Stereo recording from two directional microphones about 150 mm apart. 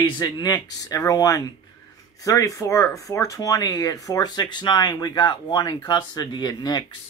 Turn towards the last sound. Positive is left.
turn(degrees=25)  # may be behind; listen again after turning